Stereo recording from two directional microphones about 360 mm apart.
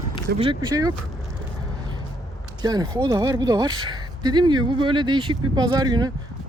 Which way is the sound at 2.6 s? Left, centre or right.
Centre.